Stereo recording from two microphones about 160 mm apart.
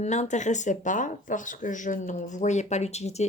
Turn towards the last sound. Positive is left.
turn(degrees=45)  # may be behind; listen again after turning